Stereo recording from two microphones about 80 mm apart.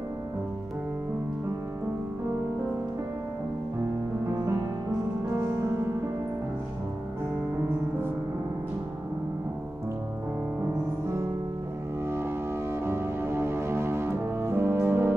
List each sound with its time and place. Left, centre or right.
12.8 s music: right